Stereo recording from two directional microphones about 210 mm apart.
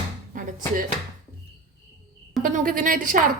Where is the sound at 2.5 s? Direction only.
40° right (ahead or behind).